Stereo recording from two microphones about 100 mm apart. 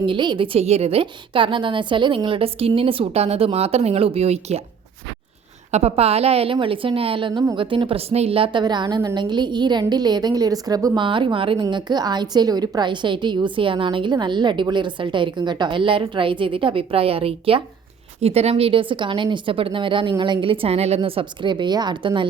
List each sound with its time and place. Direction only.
0.0 s a woman's voice: 55° right (ahead or behind); by 4.6 s 90° right
5.8 s a woman's voice: 90° right; by 8.6 s 70° right (ahead or behind)
8.6 s a woman's voice: 45° right (ahead or behind)
10.9 s a woman's voice: 55° right (ahead or behind)
11.5 s a woman's voice: 45° right (ahead or behind); by 17.6 s 70° right (ahead or behind)
18.2 s a woman's voice: 90° right; by 22.3 s 50° right (ahead or behind)